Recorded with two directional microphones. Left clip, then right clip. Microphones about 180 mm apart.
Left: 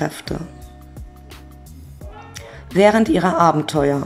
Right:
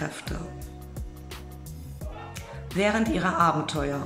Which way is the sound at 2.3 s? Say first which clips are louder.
Left 12 dB; 35° left (ahead or behind).